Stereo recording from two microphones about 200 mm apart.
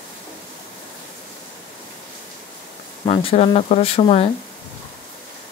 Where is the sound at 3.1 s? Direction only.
25° left (ahead or behind).